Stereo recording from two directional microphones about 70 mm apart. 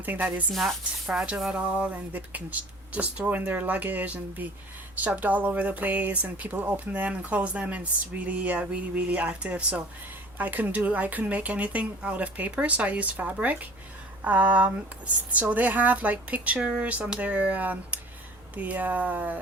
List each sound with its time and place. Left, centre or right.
0.0 s speech: right
0.5 s speech: centre
1.0 s speech: centre
1.5 s speech: right